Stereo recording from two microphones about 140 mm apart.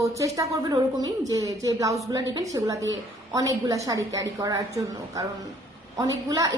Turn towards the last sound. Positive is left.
turn(degrees=-25)  # may be behind; listen again after turning